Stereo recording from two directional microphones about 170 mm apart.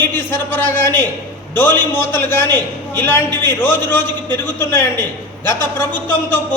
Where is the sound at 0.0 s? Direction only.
10° left (ahead or behind).